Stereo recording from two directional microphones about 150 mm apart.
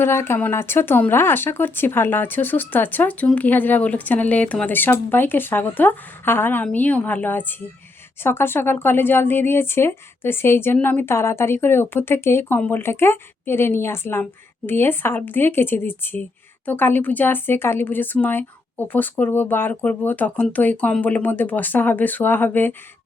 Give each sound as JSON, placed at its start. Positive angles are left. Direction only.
{"t": 0.0, "sound": "speech", "side_deg": 15}